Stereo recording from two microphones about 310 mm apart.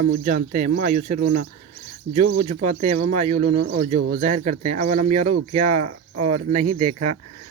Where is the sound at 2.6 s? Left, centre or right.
Right.